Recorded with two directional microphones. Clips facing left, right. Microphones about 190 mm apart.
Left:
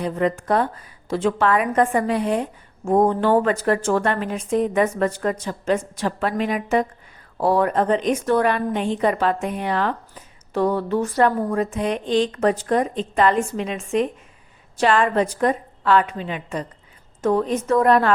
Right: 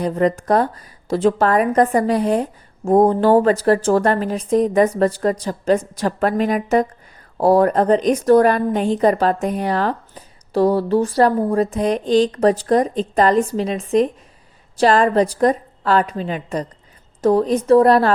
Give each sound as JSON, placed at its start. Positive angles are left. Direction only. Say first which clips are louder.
{"t": 0.0, "sound": "a woman's voice", "louder": "right 4 dB", "side_deg": -40}